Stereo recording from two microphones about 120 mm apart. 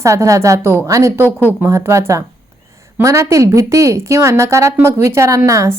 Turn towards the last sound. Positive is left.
turn(degrees=-25)  # may be behind; listen again after turning